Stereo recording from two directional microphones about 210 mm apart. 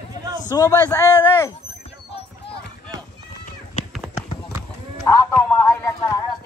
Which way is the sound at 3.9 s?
Centre (ahead or behind).